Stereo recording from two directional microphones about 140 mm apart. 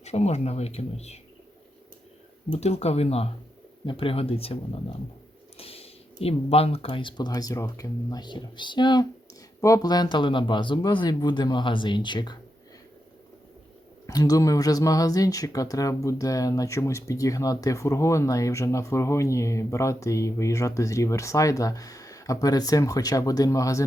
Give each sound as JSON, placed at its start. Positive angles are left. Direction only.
{"t": 0.0, "sound": "speech", "side_deg": 50}
{"t": 2.5, "sound": "speech", "side_deg": 50}
{"t": 14.1, "sound": "speech", "side_deg": 25}